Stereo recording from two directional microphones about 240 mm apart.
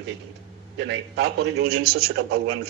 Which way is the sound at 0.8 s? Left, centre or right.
Right.